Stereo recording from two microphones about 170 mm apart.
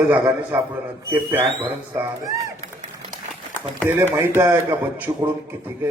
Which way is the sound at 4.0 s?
15° right (ahead or behind).